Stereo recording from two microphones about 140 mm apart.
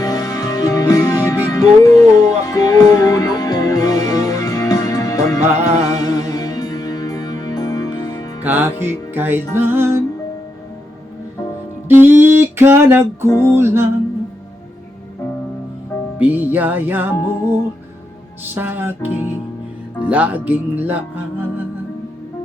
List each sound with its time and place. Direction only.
0.0 s music: 25° left (ahead or behind)
8.4 s music: 15° right (ahead or behind)
11.9 s music: 15° right (ahead or behind)
13.2 s music: 15° left (ahead or behind)
13.5 s music: 15° right (ahead or behind)
16.1 s music: 10° right (ahead or behind)